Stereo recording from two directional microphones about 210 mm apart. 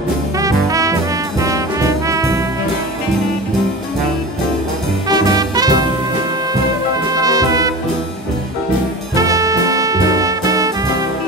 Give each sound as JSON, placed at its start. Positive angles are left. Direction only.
{"t": 0.4, "sound": "brass instrument", "side_deg": -15}
{"t": 5.1, "sound": "music", "side_deg": -20}
{"t": 7.1, "sound": "brass instrument", "side_deg": -15}
{"t": 9.1, "sound": "music", "side_deg": -15}